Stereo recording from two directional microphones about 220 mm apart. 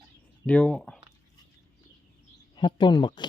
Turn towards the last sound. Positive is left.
turn(degrees=20)  # may be behind; listen again after turning